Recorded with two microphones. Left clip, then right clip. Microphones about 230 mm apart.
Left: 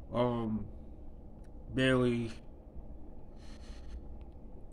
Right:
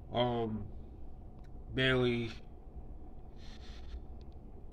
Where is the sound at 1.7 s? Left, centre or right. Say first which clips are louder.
Left 1 dB; centre.